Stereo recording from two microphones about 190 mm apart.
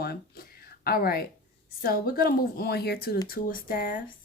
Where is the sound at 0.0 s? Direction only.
55° left (ahead or behind).